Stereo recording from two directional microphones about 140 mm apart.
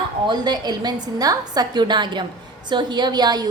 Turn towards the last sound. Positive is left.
turn(degrees=-30)  # may be behind; listen again after turning